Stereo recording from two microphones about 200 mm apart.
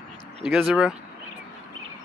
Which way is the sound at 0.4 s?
5° right (ahead or behind).